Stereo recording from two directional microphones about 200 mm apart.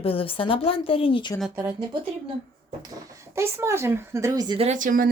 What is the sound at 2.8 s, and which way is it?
Speech, 15° right (ahead or behind).